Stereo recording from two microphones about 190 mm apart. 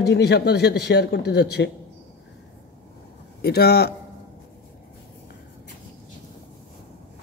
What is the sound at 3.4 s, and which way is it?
Speech, 55° left (ahead or behind).